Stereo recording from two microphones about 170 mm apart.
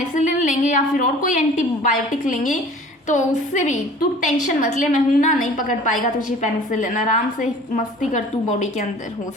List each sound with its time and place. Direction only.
0.2 s a woman's voice: 45° left (ahead or behind)